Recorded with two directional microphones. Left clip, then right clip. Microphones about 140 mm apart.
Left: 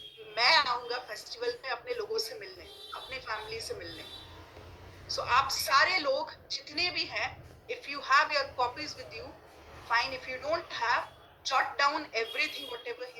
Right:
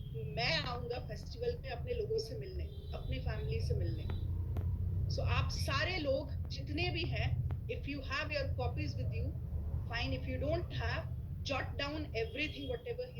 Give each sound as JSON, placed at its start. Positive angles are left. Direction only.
{"t": 0.3, "sound": "a woman's voice", "side_deg": -15}
{"t": 5.0, "sound": "a woman's voice", "side_deg": -15}